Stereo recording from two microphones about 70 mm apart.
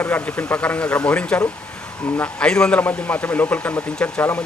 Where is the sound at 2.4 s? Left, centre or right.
Centre.